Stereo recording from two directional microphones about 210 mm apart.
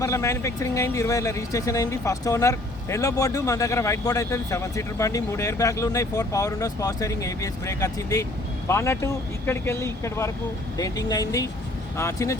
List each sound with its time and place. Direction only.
0.0 s speech: 15° left (ahead or behind)